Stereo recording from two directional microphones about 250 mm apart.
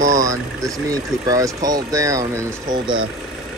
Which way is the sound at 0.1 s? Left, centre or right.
Centre.